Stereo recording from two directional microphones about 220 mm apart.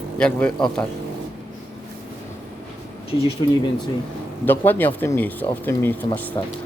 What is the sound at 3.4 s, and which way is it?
Speech, 25° left (ahead or behind).